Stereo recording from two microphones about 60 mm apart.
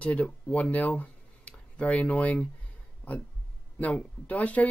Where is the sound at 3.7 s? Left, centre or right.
Left.